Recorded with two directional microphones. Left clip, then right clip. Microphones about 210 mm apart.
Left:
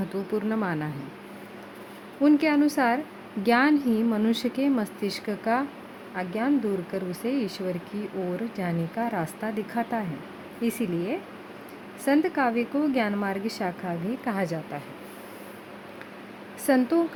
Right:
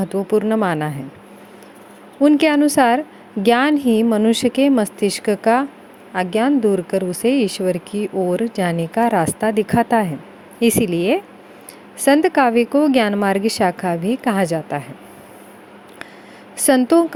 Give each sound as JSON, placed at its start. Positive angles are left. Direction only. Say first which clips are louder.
{"t": 0.0, "sound": "speech", "louder": "right 11 dB", "side_deg": -35}
{"t": 2.2, "sound": "speech", "louder": "right 8 dB", "side_deg": -35}
{"t": 16.6, "sound": "speech", "louder": "right 9 dB", "side_deg": -35}